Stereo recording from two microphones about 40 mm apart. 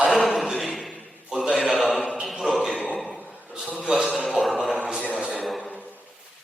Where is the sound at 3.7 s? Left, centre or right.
Right.